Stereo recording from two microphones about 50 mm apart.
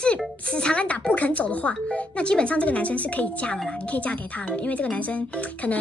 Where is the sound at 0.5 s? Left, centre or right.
Left.